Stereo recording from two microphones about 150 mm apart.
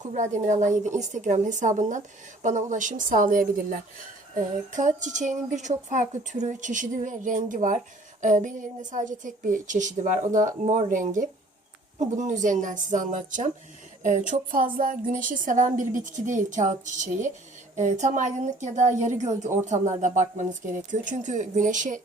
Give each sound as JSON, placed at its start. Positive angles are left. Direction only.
{"t": 0.0, "sound": "a woman's voice", "side_deg": -55}